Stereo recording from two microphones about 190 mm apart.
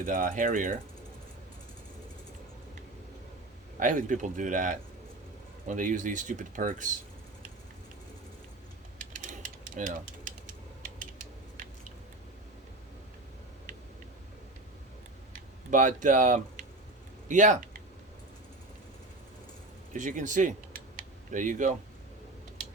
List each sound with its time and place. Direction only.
0.0 s speech: 45° right (ahead or behind)
3.8 s speech: 45° right (ahead or behind)
9.1 s typewriter: 45° right (ahead or behind)
15.3 s a sound: 45° right (ahead or behind)
19.9 s speech: 40° right (ahead or behind)